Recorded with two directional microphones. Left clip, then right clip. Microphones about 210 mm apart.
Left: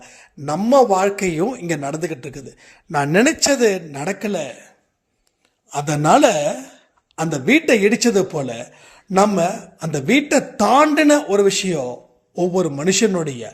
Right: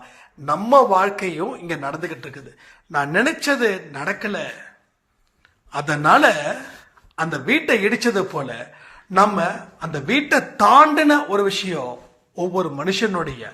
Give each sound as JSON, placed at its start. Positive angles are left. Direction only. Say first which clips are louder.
{"t": 0.0, "sound": "a man's voice", "louder": "even", "side_deg": 55}
{"t": 5.7, "sound": "a man's voice", "louder": "even", "side_deg": 55}